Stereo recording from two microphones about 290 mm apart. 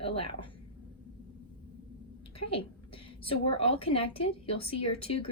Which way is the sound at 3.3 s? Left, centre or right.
Centre.